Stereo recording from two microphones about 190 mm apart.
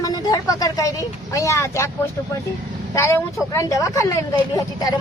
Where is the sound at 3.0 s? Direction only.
15° left (ahead or behind).